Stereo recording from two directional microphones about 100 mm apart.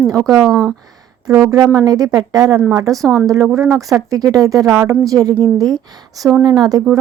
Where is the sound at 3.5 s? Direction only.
30° right (ahead or behind).